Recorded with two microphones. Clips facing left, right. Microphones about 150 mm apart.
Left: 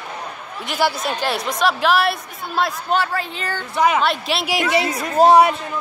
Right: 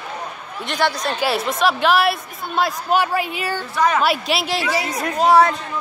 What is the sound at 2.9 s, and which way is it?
A woman's voice, 15° right (ahead or behind).